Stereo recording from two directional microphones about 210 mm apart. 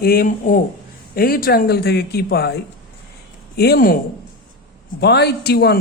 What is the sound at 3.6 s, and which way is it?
Speech, 45° left (ahead or behind).